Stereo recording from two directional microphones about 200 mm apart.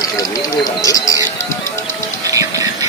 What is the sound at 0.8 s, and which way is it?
Music, 15° left (ahead or behind).